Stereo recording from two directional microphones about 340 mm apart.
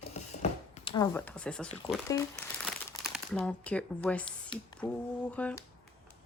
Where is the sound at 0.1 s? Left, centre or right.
Centre.